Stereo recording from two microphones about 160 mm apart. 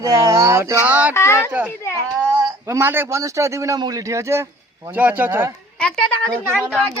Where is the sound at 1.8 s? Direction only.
15° left (ahead or behind).